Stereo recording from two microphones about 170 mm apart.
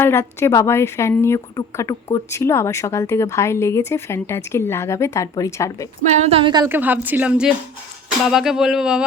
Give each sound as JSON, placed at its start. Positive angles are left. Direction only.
{"t": 0.0, "sound": "a woman's voice", "side_deg": 15}
{"t": 6.1, "sound": "speech", "side_deg": -35}
{"t": 6.7, "sound": "speech", "side_deg": -10}
{"t": 8.3, "sound": "a sound", "side_deg": -5}